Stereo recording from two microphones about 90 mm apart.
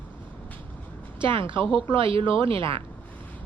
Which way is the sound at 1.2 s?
65° right (ahead or behind).